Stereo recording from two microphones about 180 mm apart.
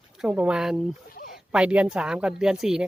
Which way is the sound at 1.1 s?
55° left (ahead or behind).